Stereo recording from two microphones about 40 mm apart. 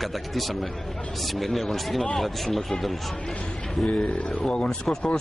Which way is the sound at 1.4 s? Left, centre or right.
Centre.